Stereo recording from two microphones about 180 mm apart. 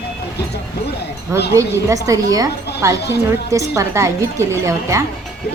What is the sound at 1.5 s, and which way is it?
A woman's voice, 20° right (ahead or behind).